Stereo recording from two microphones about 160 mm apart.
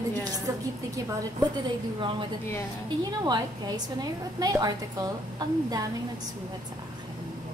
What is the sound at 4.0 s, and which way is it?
A woman's voice, 25° right (ahead or behind).